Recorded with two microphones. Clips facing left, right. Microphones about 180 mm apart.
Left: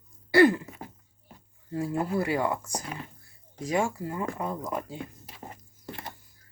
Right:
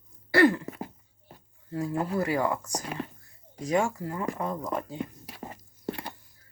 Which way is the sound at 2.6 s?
30° left (ahead or behind).